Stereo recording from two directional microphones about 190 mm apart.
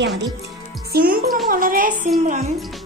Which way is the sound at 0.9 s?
50° right (ahead or behind).